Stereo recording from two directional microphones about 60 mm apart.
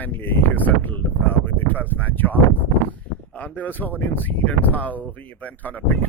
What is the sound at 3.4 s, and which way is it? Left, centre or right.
Speech, left.